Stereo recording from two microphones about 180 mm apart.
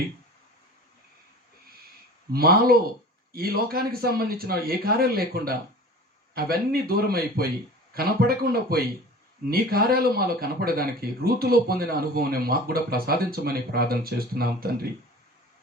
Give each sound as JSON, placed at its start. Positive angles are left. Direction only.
{"t": 2.3, "sound": "speech", "side_deg": -55}